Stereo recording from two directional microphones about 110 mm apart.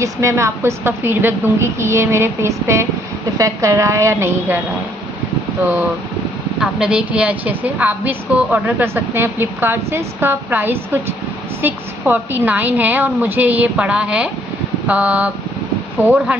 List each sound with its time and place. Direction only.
0.0 s a woman's voice: 25° right (ahead or behind)
5.6 s a woman's voice: 15° right (ahead or behind)